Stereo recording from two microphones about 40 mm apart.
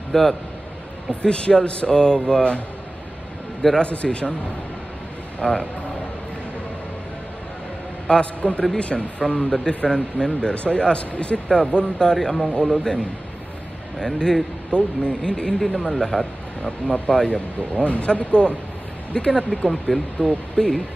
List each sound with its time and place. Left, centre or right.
0.1 s a man's voice: centre
1.2 s speech: left
3.8 s speech: left
5.4 s a man's voice: centre
8.1 s a man's voice: left; by 14.4 s centre
14.7 s a man's voice: left